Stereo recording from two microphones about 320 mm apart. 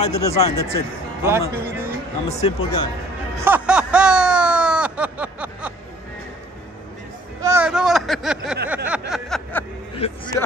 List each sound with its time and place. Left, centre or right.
0.0 s speech: centre
1.2 s speech: centre
2.2 s speech: centre
3.4 s a sound: centre
7.4 s speech: centre
8.6 s a sound: centre
9.9 s speech: centre